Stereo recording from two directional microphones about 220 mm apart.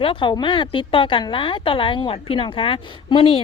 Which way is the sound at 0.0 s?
25° left (ahead or behind).